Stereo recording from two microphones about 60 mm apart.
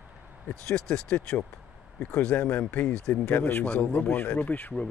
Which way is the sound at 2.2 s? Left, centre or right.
Centre.